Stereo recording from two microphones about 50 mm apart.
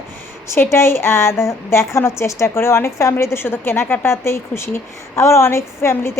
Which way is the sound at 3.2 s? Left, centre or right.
Left.